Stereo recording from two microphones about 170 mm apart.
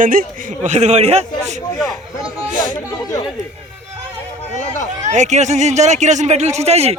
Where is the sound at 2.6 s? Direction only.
25° left (ahead or behind).